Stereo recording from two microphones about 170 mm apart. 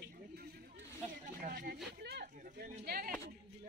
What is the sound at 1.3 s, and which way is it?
Speech, 60° right (ahead or behind).